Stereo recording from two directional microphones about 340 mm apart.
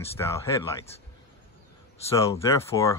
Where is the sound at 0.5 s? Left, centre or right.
Centre.